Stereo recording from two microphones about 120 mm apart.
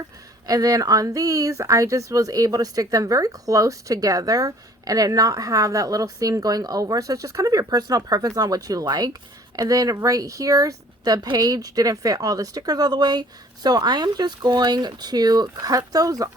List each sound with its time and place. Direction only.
0.4 s speech: 30° right (ahead or behind)